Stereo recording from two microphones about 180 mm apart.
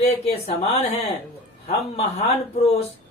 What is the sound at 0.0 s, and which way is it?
Speech, 35° left (ahead or behind).